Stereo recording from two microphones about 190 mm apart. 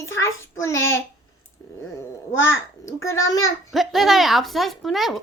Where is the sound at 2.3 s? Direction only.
90° left.